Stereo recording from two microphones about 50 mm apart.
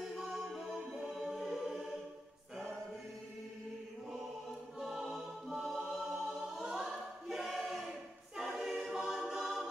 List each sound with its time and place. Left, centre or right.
0.0 s music: centre
4.7 s choir: centre